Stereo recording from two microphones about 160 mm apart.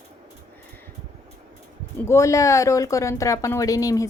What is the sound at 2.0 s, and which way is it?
Speech, 20° left (ahead or behind).